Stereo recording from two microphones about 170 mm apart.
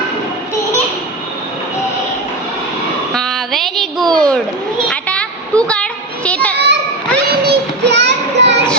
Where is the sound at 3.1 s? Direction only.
Centre (ahead or behind).